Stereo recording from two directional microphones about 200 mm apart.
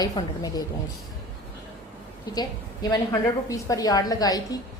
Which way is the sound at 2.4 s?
20° left (ahead or behind).